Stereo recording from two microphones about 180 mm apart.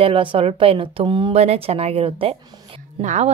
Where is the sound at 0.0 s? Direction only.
30° right (ahead or behind).